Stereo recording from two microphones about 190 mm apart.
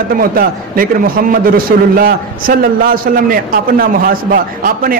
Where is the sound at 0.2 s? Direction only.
50° right (ahead or behind).